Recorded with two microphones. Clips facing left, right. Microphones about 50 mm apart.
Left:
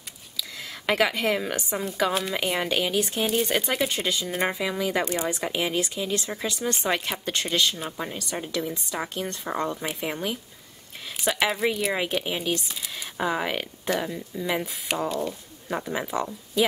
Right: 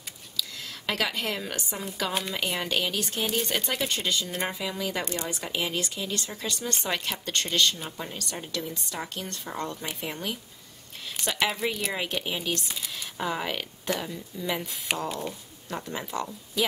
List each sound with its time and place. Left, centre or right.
0.4 s a woman's voice: centre
14.9 s speech: centre
15.7 s speech: centre